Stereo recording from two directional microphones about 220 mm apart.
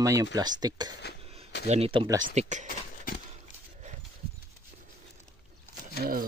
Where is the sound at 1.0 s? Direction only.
50° left (ahead or behind).